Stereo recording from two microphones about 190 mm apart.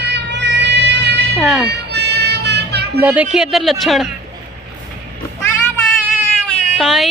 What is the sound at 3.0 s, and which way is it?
A woman's voice, 10° right (ahead or behind).